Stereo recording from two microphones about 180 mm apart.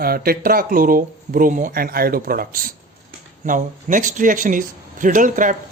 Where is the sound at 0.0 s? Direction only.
55° right (ahead or behind).